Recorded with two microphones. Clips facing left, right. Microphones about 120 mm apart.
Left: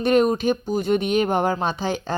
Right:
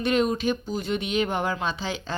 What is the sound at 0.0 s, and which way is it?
Speech, 45° left (ahead or behind).